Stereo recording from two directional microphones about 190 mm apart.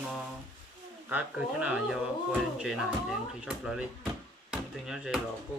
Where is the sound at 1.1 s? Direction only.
5° right (ahead or behind).